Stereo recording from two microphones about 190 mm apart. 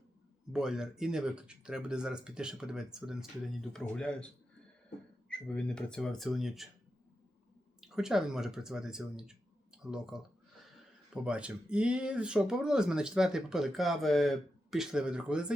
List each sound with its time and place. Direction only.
0.5 s speech: 5° right (ahead or behind)
5.3 s speech: 5° left (ahead or behind)
7.8 s speech: 5° right (ahead or behind)